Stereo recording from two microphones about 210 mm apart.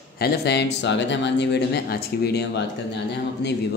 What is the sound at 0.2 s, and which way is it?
A man's voice, 50° left (ahead or behind).